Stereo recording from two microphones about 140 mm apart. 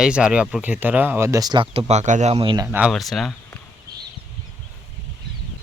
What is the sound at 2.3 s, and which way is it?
Speech, 35° right (ahead or behind).